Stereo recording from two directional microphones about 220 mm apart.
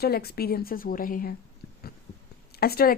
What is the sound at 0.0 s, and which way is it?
Speech, 45° left (ahead or behind).